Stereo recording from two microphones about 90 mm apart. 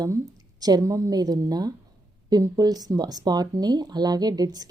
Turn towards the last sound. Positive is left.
turn(degrees=-45)  # may be behind; listen again after turning